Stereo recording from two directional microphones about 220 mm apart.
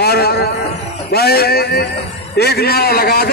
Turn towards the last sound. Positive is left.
turn(degrees=45)  # may be behind; listen again after turning